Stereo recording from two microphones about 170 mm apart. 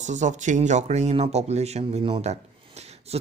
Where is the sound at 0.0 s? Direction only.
45° right (ahead or behind).